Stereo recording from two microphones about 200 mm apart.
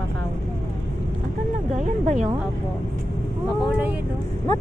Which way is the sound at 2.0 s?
35° right (ahead or behind).